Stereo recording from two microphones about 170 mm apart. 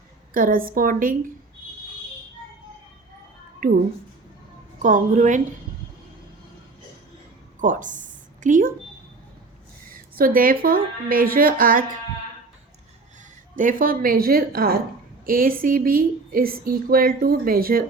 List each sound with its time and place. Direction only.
0.3 s speech: 55° right (ahead or behind)
3.6 s speech: 60° right (ahead or behind)
4.8 s a woman's voice: 50° right (ahead or behind)
7.6 s a sound: 50° right (ahead or behind)
9.9 s speech: 55° right (ahead or behind)
13.6 s speech: 55° right (ahead or behind)